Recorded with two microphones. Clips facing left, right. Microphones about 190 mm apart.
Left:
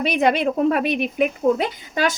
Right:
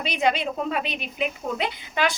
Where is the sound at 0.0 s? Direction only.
55° left (ahead or behind).